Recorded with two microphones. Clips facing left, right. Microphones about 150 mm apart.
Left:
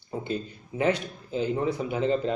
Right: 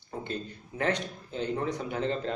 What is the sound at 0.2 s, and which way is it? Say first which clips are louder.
Speech: left 3 dB; 5° left (ahead or behind).